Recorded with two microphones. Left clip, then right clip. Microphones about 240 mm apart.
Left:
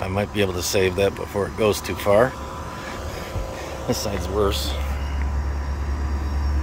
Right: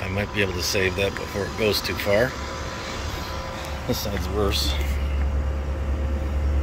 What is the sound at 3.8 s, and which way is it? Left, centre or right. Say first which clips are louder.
Speech: left 3 dB; left.